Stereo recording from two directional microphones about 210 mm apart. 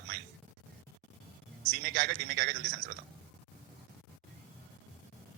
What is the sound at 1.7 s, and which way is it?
Speech, 50° right (ahead or behind).